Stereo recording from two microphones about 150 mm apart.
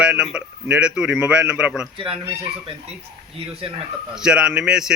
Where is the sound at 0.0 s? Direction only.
5° right (ahead or behind).